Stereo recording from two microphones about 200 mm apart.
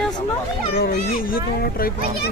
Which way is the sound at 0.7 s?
50° left (ahead or behind).